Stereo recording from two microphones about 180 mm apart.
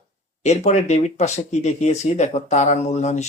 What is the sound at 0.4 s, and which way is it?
Speech, 40° left (ahead or behind).